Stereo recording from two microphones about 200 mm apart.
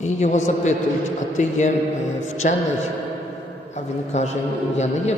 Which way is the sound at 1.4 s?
35° left (ahead or behind).